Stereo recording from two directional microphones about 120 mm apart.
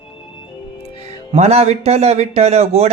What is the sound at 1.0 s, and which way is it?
Speech, 65° right (ahead or behind).